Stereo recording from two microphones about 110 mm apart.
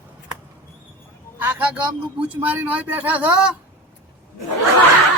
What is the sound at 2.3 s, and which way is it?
Speech, 20° right (ahead or behind).